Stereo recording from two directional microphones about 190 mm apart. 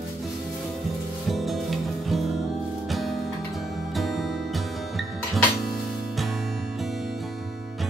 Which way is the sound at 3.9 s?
Centre (ahead or behind).